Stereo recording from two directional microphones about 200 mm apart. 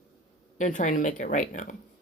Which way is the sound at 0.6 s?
40° left (ahead or behind).